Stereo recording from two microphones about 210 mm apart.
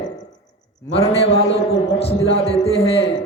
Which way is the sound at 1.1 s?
30° left (ahead or behind).